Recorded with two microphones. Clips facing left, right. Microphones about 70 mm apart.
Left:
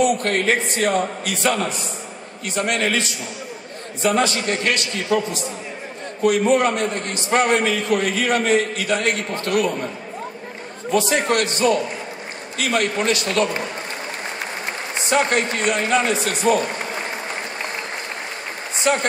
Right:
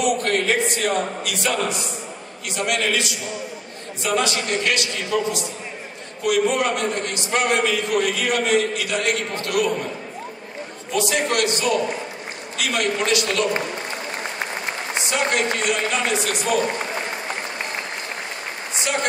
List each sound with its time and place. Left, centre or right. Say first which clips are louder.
0.0 s a man's voice: left 2 dB; left
10.9 s a man's voice: left 3 dB; left
15.0 s a man's voice: left 3 dB; left
18.9 s speech: left 6 dB; left